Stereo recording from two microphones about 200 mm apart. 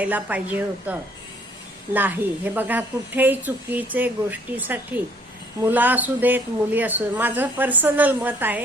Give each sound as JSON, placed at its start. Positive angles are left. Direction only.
{"t": 0.0, "sound": "a woman's voice", "side_deg": -5}